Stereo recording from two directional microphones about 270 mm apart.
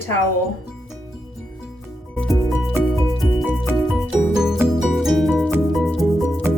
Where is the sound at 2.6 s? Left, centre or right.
Centre.